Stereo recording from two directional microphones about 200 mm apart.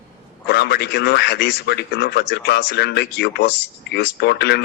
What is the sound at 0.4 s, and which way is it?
A man's voice, 55° left (ahead or behind).